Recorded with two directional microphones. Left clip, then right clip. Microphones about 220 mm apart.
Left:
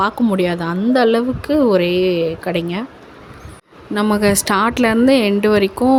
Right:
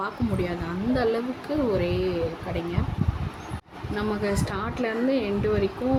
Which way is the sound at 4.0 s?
45° left (ahead or behind).